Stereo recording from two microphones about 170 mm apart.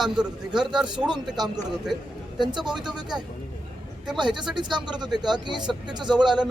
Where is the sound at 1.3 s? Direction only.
25° right (ahead or behind).